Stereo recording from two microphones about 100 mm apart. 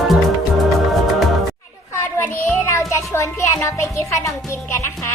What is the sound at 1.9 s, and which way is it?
Child singing, 20° left (ahead or behind).